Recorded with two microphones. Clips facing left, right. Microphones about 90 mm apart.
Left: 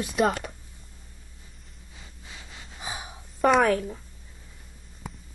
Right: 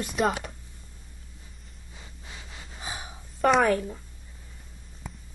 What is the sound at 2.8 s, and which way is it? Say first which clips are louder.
Gasp: left 1 dB; 15° left (ahead or behind).